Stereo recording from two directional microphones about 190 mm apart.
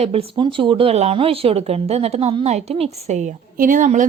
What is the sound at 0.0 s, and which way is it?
Speech, 30° right (ahead or behind).